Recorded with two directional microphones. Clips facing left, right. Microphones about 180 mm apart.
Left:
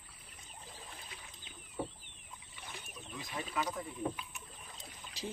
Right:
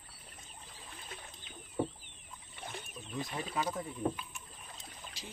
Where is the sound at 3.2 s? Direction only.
40° right (ahead or behind).